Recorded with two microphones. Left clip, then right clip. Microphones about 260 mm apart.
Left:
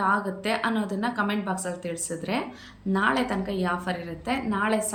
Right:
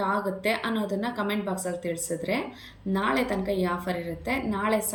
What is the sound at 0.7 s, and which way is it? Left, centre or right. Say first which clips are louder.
A woman's voice: left 1 dB; centre.